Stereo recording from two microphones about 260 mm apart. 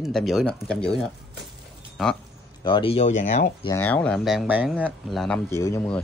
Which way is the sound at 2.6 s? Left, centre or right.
Centre.